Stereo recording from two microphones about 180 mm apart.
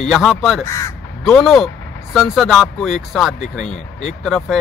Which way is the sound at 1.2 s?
Centre (ahead or behind).